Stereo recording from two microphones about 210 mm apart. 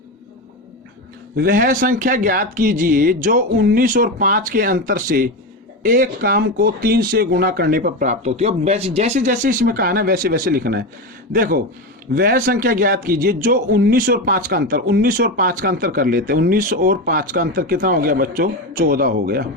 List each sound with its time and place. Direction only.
1.4 s a man's voice: 40° right (ahead or behind)